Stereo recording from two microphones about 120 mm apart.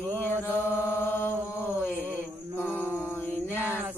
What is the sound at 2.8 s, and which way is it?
Music, 20° left (ahead or behind).